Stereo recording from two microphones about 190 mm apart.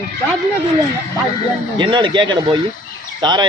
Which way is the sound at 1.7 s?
25° right (ahead or behind).